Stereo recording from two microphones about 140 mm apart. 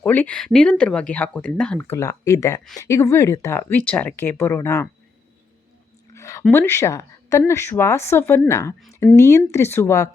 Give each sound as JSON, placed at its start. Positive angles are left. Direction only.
{"t": 0.0, "sound": "speech", "side_deg": 15}
{"t": 1.8, "sound": "a woman's voice", "side_deg": 20}
{"t": 6.1, "sound": "a sound", "side_deg": 20}
{"t": 6.5, "sound": "a woman's voice", "side_deg": 15}